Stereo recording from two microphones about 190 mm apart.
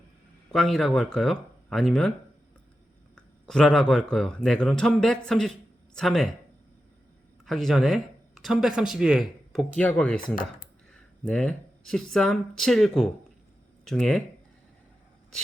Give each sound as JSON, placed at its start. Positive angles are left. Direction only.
{"t": 0.5, "sound": "speech", "side_deg": 0}
{"t": 3.2, "sound": "a man's voice", "side_deg": 5}
{"t": 7.4, "sound": "speech", "side_deg": 0}
{"t": 11.3, "sound": "speech", "side_deg": 5}